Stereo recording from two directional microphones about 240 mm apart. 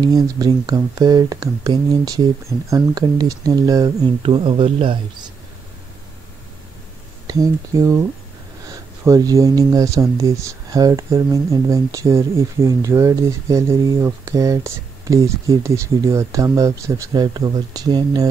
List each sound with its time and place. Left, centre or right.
0.0 s speech: centre
7.2 s speech: centre
9.0 s speech: centre